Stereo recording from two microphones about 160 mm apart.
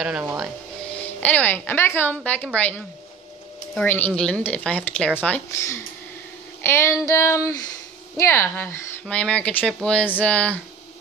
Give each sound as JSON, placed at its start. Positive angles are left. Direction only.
{"t": 0.9, "sound": "speech", "side_deg": 10}
{"t": 3.7, "sound": "speech", "side_deg": 10}
{"t": 6.6, "sound": "child singing", "side_deg": 15}
{"t": 7.1, "sound": "speech", "side_deg": 15}